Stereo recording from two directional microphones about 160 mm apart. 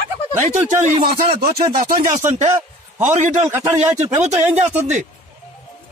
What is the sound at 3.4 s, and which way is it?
Speech, 15° right (ahead or behind).